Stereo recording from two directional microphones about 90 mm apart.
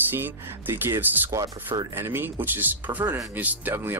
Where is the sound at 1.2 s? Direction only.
40° right (ahead or behind).